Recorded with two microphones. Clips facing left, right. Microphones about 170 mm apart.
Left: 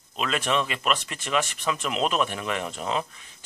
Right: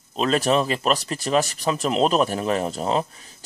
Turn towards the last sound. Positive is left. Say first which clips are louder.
# right 5 dB
turn(degrees=-35)  # may be behind; listen again after turning